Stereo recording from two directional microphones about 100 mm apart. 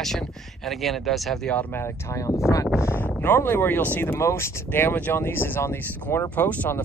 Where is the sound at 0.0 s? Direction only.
5° left (ahead or behind).